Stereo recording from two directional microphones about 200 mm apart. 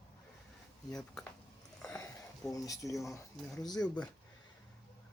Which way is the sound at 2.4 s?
15° left (ahead or behind).